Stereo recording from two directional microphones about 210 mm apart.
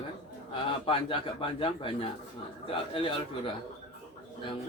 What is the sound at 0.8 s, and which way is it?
A man's voice, 25° left (ahead or behind).